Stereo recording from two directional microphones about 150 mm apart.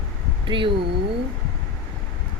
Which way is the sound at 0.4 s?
35° right (ahead or behind).